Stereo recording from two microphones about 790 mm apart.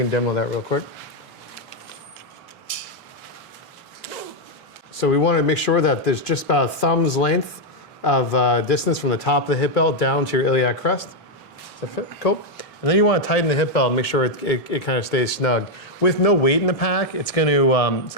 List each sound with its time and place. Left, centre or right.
0.1 s speech: left
4.9 s a man's voice: left
11.8 s speech: left